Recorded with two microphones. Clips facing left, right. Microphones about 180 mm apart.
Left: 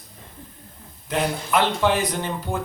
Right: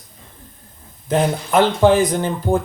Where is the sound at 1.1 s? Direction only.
45° right (ahead or behind).